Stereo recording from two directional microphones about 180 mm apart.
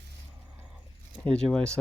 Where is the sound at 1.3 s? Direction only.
5° left (ahead or behind).